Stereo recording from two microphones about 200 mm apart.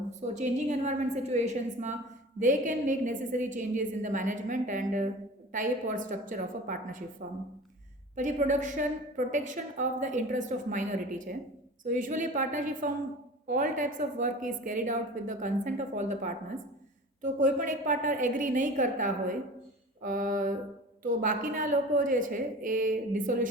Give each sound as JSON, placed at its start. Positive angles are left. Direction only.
{"t": 0.1, "sound": "a woman's voice", "side_deg": -35}
{"t": 8.1, "sound": "a woman's voice", "side_deg": -40}
{"t": 11.9, "sound": "a woman's voice", "side_deg": -40}